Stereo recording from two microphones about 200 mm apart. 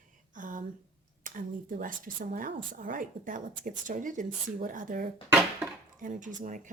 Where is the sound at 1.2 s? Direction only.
40° right (ahead or behind).